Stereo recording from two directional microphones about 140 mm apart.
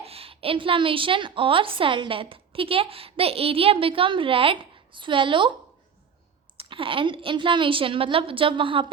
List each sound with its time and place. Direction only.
0.0 s a woman's voice: 45° right (ahead or behind)
6.6 s a woman's voice: 40° right (ahead or behind)